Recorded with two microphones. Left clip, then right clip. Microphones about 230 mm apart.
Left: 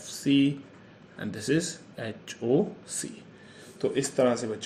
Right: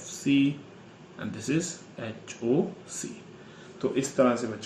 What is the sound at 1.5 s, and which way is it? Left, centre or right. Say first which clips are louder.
Speech: left 2 dB; left.